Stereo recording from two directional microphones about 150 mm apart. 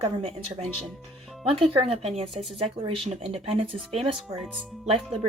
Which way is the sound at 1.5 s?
40° right (ahead or behind).